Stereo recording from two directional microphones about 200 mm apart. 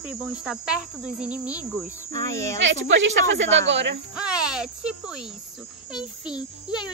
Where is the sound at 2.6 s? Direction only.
70° right (ahead or behind).